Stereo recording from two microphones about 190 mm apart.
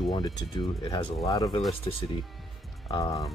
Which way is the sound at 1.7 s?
30° left (ahead or behind).